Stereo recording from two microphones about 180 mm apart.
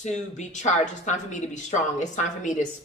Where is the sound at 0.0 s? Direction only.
40° left (ahead or behind).